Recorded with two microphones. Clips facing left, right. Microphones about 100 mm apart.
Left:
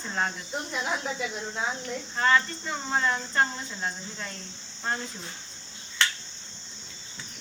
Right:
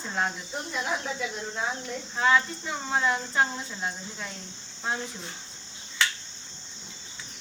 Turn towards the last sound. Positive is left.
turn(degrees=0)  # may be behind; listen again after turning